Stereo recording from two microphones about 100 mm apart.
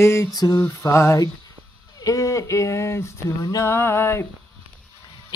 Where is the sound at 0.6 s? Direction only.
30° left (ahead or behind).